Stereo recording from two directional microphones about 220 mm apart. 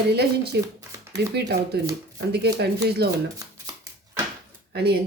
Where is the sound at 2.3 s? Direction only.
50° right (ahead or behind).